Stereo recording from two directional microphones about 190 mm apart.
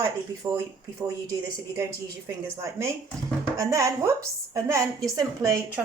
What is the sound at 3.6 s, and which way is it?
A woman's voice, 15° right (ahead or behind).